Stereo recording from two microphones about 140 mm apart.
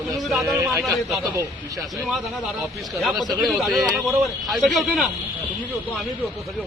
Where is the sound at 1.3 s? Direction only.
25° right (ahead or behind).